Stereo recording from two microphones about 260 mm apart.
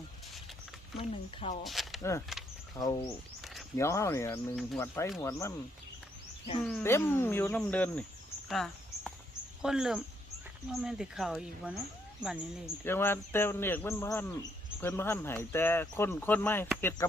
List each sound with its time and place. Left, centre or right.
0.9 s speech: left
1.6 s speech: centre
2.0 s speech: centre
6.6 s speech: centre
8.4 s a sound: centre
9.6 s speech: centre
12.8 s speech: centre